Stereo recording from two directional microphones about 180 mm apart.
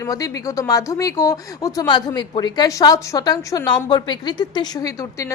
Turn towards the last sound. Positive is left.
turn(degrees=20)  # may be behind; listen again after turning